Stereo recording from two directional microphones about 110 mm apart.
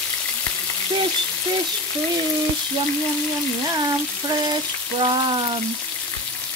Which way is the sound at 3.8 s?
35° right (ahead or behind).